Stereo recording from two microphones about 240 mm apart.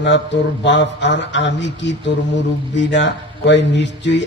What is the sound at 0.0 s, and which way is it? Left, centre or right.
Mantra, left.